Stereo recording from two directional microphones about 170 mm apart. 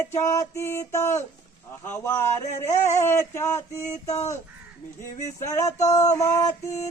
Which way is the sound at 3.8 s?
40° left (ahead or behind).